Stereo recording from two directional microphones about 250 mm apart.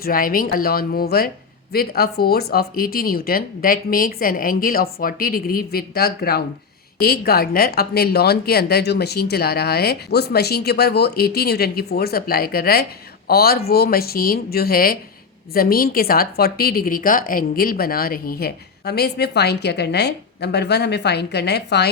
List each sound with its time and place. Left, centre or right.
0.0 s a woman's voice: left